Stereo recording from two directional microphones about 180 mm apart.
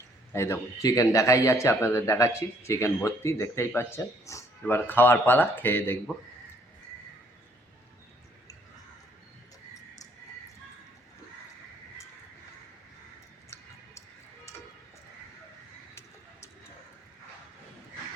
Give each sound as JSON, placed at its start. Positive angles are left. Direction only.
{"t": 0.3, "sound": "a man's voice", "side_deg": 15}